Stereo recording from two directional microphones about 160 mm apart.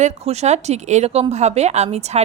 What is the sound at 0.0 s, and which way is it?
A woman's voice, 45° right (ahead or behind).